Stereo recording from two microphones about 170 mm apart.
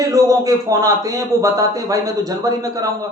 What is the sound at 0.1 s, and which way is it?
A man's voice, 20° right (ahead or behind).